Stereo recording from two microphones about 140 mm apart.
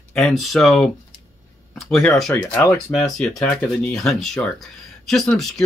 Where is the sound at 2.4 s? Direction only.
15° left (ahead or behind).